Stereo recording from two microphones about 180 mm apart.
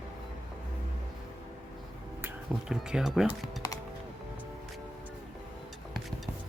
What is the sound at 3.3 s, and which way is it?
Speech, 20° left (ahead or behind).